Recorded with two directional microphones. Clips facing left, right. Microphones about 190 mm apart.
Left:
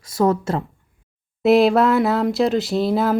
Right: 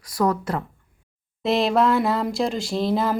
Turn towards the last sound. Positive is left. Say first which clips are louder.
# left 4 dB
turn(degrees=5)  # may be behind; listen again after turning